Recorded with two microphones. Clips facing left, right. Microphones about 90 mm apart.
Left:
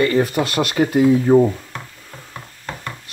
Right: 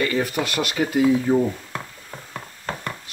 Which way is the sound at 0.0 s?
40° left (ahead or behind).